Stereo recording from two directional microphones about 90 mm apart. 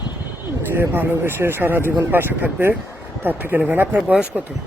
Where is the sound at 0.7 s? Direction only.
25° right (ahead or behind).